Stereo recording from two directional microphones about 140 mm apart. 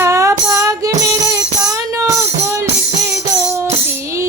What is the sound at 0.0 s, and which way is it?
Music, 20° right (ahead or behind).